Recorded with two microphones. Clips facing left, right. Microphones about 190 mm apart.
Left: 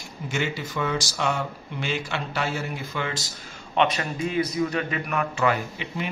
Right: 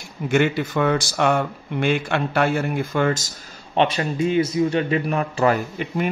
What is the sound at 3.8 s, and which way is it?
A man's voice, 30° right (ahead or behind).